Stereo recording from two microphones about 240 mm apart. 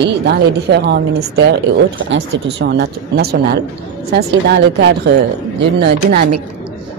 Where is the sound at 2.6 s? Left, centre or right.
Right.